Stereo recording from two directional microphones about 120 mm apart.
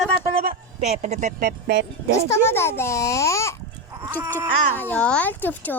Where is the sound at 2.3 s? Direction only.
20° left (ahead or behind).